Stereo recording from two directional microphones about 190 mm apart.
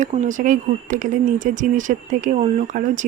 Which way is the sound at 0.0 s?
40° right (ahead or behind).